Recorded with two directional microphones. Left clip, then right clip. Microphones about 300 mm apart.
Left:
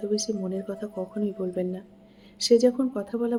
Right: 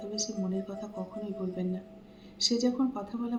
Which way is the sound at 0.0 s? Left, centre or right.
Left.